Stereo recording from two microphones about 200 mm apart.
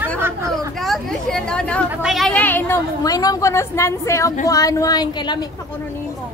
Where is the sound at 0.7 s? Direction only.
Centre (ahead or behind); by 5.4 s 20° left (ahead or behind).